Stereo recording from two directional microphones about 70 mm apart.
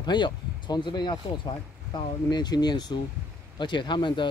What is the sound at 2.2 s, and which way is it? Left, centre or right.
Speech, left.